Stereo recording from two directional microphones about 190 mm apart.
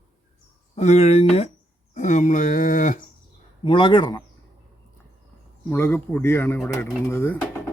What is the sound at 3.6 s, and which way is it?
Speech, 25° left (ahead or behind).